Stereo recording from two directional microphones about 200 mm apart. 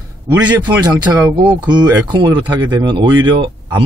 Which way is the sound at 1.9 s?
20° right (ahead or behind).